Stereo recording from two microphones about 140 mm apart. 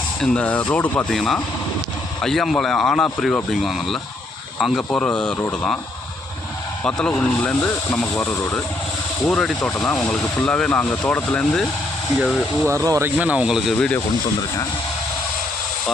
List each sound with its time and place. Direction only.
0.2 s speech: 5° left (ahead or behind)
6.8 s speech: 10° left (ahead or behind)
12.6 s speech: 20° right (ahead or behind)
13.1 s speech: 10° right (ahead or behind)